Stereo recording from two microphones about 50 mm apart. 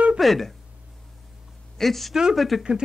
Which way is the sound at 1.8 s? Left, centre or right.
Centre.